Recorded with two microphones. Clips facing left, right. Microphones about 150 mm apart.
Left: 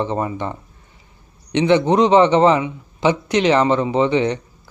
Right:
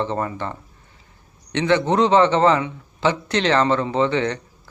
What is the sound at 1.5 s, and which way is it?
A man's voice, 15° left (ahead or behind).